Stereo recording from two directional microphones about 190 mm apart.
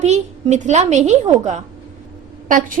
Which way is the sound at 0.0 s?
35° right (ahead or behind).